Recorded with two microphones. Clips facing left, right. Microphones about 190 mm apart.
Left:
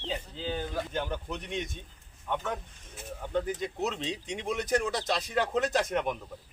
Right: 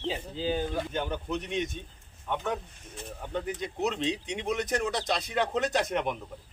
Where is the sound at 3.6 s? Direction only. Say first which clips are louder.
Right 2 dB; centre (ahead or behind).